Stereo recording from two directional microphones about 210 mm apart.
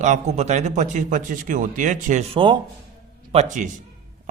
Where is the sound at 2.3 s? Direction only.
20° right (ahead or behind).